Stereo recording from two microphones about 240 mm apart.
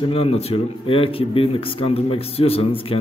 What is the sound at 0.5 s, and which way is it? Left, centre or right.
Speech, left.